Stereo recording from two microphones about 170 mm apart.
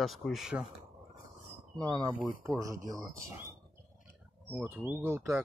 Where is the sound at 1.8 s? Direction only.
25° right (ahead or behind).